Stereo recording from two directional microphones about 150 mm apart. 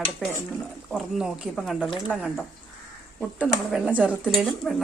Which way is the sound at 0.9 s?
Centre (ahead or behind).